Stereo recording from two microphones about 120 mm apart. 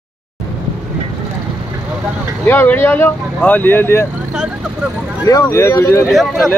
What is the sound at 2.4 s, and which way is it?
Speech, 15° left (ahead or behind).